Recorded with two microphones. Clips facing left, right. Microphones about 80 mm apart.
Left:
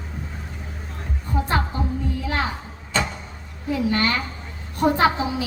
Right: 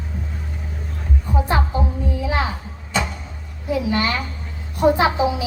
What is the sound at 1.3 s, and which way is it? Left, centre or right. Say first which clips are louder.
Music: right 2 dB; centre.